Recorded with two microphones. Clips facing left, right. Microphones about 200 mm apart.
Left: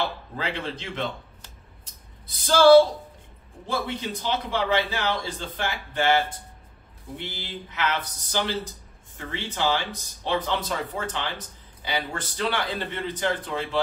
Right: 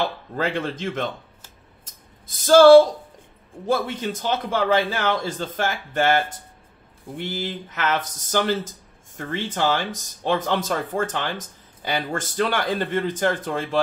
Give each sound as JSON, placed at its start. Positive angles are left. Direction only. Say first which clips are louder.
{"t": 0.4, "sound": "speech", "louder": "right 6 dB", "side_deg": -50}
{"t": 2.2, "sound": "speech", "louder": "right 5 dB", "side_deg": -45}